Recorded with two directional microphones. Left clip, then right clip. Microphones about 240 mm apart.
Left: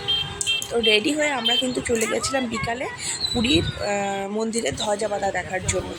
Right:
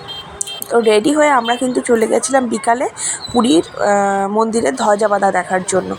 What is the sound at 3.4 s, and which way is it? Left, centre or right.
Speech, centre.